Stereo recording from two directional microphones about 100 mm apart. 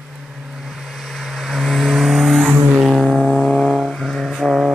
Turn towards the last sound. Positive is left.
turn(degrees=0)  # may be behind; listen again after turning